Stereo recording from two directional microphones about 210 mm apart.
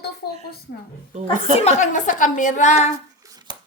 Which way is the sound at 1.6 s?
35° left (ahead or behind).